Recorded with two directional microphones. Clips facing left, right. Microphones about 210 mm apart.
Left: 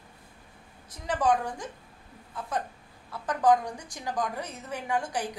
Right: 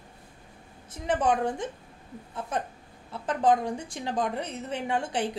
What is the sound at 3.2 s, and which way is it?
Speech, 25° right (ahead or behind).